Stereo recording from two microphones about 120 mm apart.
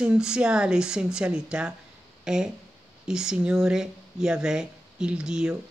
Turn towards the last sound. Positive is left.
turn(degrees=-5)  # may be behind; listen again after turning